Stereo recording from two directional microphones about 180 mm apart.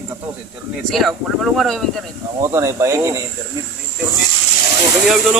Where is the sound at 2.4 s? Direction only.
15° right (ahead or behind).